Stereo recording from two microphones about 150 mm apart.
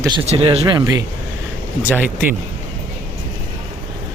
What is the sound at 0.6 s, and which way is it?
Speech, 25° right (ahead or behind).